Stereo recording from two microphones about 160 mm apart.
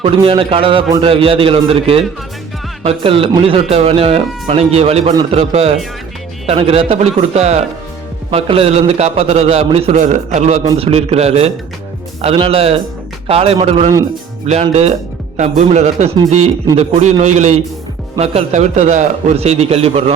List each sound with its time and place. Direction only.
0.0 s a man's voice: 35° right (ahead or behind)